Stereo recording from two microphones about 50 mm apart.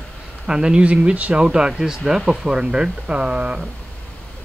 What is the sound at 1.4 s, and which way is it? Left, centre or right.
Speech, centre.